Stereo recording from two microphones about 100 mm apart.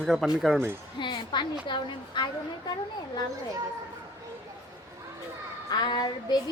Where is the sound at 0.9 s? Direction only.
50° left (ahead or behind).